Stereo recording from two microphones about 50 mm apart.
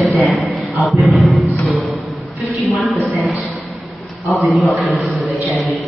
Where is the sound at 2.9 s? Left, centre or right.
Right.